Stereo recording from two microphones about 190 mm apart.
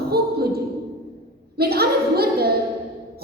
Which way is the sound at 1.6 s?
55° right (ahead or behind).